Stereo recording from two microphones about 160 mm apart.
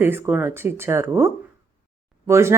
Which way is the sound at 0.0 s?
15° right (ahead or behind).